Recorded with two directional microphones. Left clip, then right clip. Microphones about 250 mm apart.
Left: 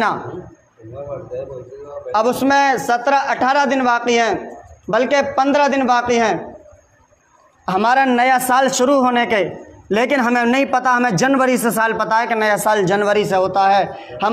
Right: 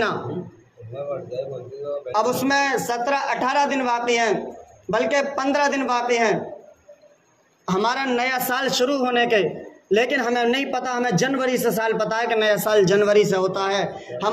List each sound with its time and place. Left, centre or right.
2.0 s a man's voice: left
7.6 s a man's voice: left